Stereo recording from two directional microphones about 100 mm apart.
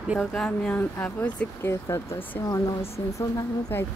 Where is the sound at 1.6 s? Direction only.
30° left (ahead or behind).